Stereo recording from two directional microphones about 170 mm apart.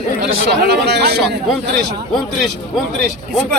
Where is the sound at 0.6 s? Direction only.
75° right (ahead or behind).